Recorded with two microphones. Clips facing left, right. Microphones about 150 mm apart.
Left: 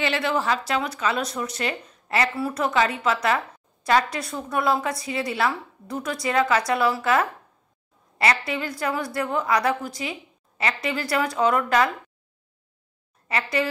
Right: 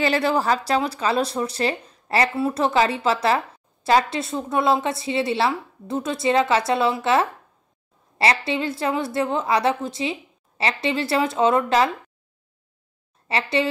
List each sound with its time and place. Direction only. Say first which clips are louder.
0.0 s speech: right 4 dB; 40° right (ahead or behind)
13.3 s speech: right 3 dB; 25° right (ahead or behind)